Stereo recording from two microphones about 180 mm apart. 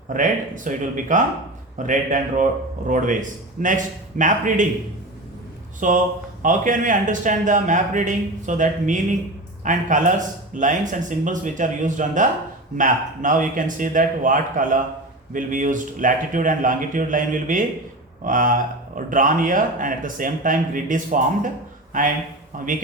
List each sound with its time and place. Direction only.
0.1 s a man's voice: 45° right (ahead or behind)
5.8 s a man's voice: 45° right (ahead or behind)
22.5 s a man's voice: 50° right (ahead or behind)